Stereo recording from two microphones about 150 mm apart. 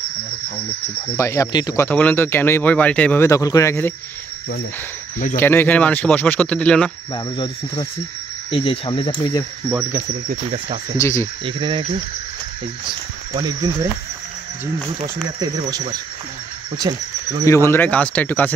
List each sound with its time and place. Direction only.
1.1 s speech: 20° left (ahead or behind)
1.9 s speech: 10° left (ahead or behind)
5.3 s speech: 15° left (ahead or behind)
7.2 s speech: 30° left (ahead or behind)
11.0 s speech: 20° left (ahead or behind)
11.4 s speech: 35° right (ahead or behind)
13.3 s speech: 30° right (ahead or behind)
16.7 s speech: 25° right (ahead or behind)
17.5 s speech: 15° left (ahead or behind)